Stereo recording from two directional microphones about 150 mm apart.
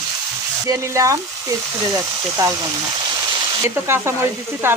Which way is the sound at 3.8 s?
15° right (ahead or behind).